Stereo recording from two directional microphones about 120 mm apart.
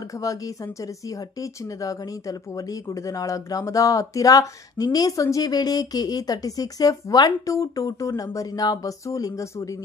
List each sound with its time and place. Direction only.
1.4 s speech: 30° left (ahead or behind)